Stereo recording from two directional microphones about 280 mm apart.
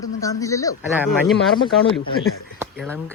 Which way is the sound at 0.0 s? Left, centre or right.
Centre.